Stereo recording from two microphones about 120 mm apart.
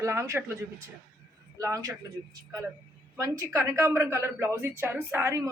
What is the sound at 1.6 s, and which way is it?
Speech, 25° right (ahead or behind).